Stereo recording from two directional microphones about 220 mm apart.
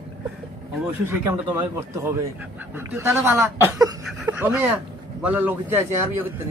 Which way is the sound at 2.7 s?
10° right (ahead or behind).